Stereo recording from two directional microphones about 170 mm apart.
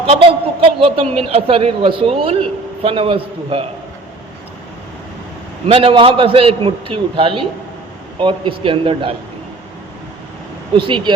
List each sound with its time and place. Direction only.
0.1 s a man's voice: 35° right (ahead or behind)
5.6 s a man's voice: 35° right (ahead or behind)
10.8 s speech: 30° right (ahead or behind)